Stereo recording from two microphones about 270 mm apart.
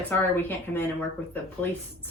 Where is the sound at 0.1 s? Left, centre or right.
Centre.